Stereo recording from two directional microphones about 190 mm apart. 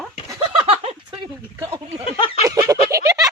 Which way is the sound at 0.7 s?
30° right (ahead or behind).